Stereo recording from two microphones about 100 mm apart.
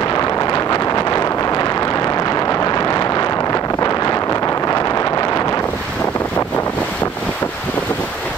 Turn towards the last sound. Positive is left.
turn(degrees=20)  # may be behind; listen again after turning